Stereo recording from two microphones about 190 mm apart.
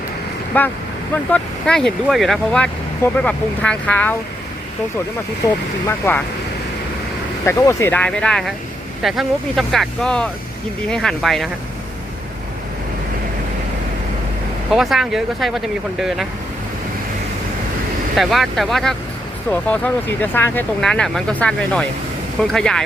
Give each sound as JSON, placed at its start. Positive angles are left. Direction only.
{"t": 0.5, "sound": "speech", "side_deg": 10}
{"t": 6.0, "sound": "speech", "side_deg": 15}
{"t": 7.4, "sound": "speech", "side_deg": 15}
{"t": 14.7, "sound": "speech", "side_deg": 0}
{"t": 18.2, "sound": "speech", "side_deg": 0}